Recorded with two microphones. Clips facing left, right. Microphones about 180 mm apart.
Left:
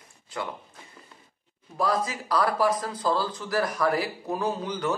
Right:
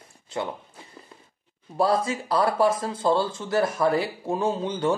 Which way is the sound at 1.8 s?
30° right (ahead or behind).